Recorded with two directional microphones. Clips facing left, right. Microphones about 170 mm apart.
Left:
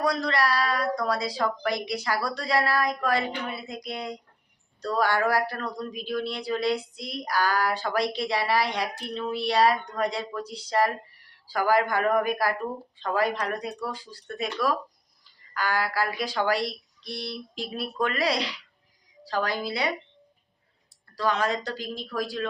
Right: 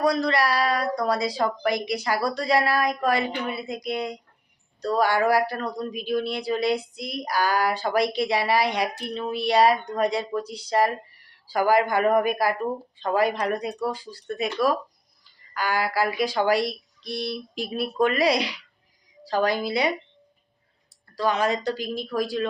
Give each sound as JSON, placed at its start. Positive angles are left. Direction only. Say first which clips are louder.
{"t": 0.0, "sound": "speech", "louder": "right 3 dB", "side_deg": -10}
{"t": 21.2, "sound": "speech", "louder": "right 3 dB", "side_deg": -15}